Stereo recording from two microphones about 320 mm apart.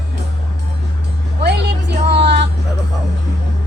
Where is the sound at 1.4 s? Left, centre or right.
Right.